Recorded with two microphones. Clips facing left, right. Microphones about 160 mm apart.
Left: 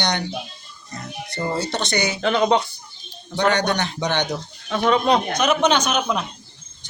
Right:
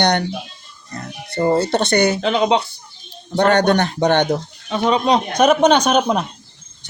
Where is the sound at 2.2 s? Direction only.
15° right (ahead or behind).